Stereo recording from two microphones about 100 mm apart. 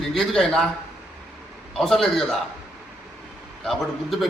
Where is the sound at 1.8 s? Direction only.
5° left (ahead or behind).